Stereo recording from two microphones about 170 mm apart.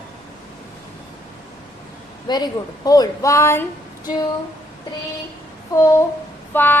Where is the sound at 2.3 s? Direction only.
25° left (ahead or behind).